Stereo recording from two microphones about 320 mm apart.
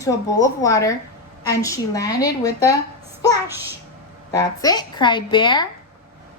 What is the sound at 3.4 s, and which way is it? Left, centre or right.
Speech, centre.